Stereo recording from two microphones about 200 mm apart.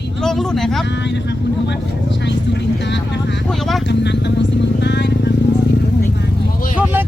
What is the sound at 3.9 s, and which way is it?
Vehicle, 60° left (ahead or behind).